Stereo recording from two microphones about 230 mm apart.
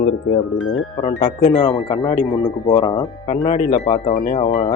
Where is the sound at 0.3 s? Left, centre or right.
Left.